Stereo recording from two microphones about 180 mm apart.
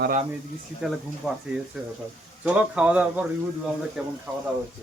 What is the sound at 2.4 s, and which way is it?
Speech, 5° right (ahead or behind).